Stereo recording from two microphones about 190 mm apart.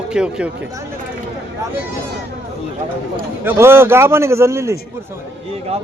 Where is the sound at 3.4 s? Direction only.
10° right (ahead or behind).